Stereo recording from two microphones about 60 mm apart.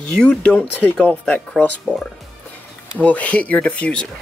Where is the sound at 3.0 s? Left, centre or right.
Left.